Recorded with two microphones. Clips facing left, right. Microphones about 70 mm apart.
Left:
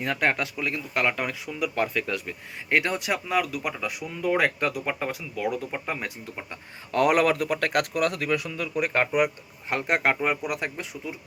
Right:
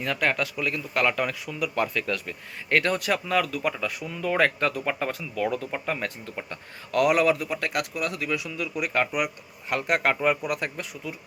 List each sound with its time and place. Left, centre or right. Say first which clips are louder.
0.0 s speech: even; left; by 6.6 s centre
6.9 s speech: even; left